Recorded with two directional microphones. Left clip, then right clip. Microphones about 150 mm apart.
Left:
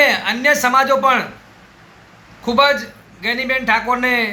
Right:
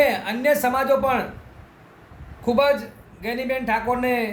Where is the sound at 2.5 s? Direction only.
15° right (ahead or behind).